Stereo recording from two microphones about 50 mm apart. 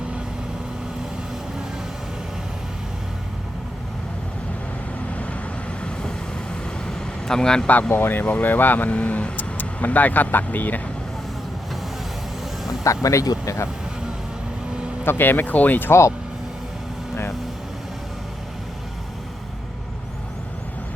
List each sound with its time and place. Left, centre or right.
5.0 s vehicle: left
7.7 s speech: left
8.2 s speech: left
9.0 s speech: left
9.4 s speech: left
12.8 s speech: left
15.0 s speech: left
15.9 s speech: left